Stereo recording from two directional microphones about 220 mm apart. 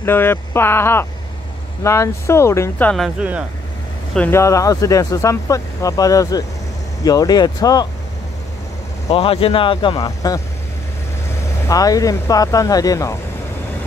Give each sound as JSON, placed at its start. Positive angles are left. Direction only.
{"t": 0.0, "sound": "speech", "side_deg": 10}
{"t": 4.1, "sound": "speech", "side_deg": 10}
{"t": 9.1, "sound": "speech", "side_deg": 25}
{"t": 11.6, "sound": "speech", "side_deg": 15}